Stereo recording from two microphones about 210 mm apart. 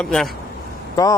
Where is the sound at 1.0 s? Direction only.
15° left (ahead or behind).